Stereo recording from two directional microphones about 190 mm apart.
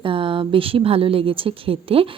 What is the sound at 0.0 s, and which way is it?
A woman's voice, 25° right (ahead or behind).